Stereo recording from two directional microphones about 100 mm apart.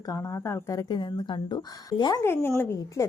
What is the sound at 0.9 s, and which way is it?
Speech, 50° left (ahead or behind).